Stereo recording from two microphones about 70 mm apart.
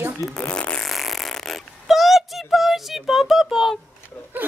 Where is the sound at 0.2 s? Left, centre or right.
Centre.